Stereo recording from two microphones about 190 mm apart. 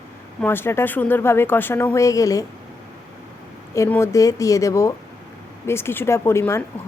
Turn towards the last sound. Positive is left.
turn(degrees=15)  # may be behind; listen again after turning